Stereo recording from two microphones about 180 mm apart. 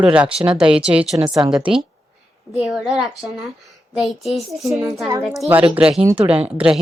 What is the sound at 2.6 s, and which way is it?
A woman's voice, centre (ahead or behind).